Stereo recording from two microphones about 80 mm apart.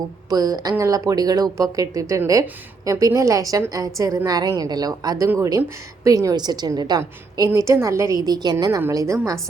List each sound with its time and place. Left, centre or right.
0.3 s a woman's voice: right
7.5 s speech: right
8.9 s speech: right